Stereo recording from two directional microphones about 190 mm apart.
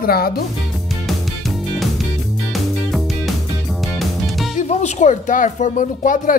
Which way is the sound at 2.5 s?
Centre (ahead or behind).